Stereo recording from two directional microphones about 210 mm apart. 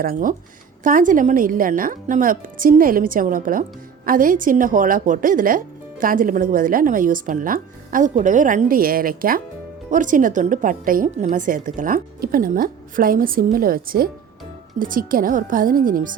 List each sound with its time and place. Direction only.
0.0 s speech: 40° right (ahead or behind)